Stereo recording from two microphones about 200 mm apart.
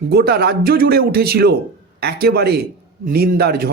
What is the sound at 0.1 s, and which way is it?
A man's voice, 55° right (ahead or behind).